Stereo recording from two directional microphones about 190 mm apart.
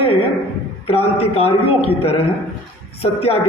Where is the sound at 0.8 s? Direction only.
30° left (ahead or behind).